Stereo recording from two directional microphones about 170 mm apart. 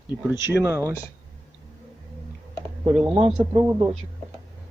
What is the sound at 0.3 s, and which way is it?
Speech, 15° right (ahead or behind).